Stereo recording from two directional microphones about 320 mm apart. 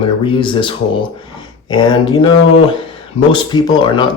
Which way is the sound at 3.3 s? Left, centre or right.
Centre.